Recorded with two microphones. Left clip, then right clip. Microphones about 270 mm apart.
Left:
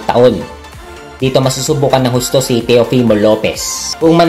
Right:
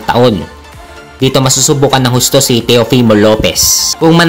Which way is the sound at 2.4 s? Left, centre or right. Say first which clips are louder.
Right 1 dB; right.